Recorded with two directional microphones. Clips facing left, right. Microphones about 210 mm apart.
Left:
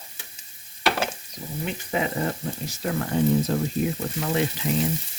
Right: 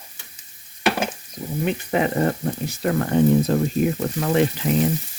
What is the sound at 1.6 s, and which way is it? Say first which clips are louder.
Speech: right 6 dB; 60° right (ahead or behind).